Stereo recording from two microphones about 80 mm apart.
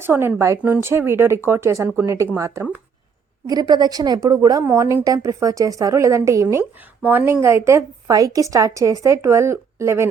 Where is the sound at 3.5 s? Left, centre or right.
Right.